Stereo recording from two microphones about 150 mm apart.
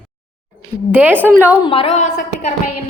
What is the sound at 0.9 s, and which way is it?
Speech, 15° right (ahead or behind).